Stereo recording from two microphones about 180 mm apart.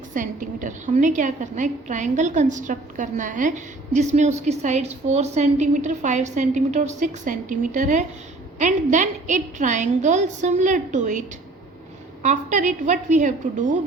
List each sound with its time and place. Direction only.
0.1 s a woman's voice: 45° right (ahead or behind)
12.2 s a woman's voice: 40° right (ahead or behind)